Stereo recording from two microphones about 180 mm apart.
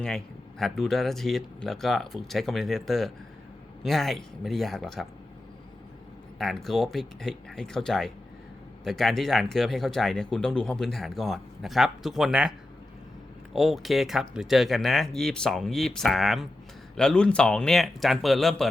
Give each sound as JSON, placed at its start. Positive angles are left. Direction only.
{"t": 0.6, "sound": "speech", "side_deg": 0}
{"t": 6.4, "sound": "speech", "side_deg": 0}